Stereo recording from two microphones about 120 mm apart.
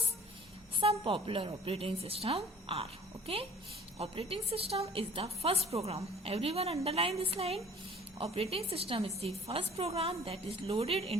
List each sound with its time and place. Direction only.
0.8 s a woman's voice: 50° right (ahead or behind)